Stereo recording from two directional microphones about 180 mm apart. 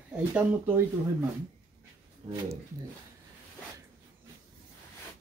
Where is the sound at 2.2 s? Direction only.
35° right (ahead or behind).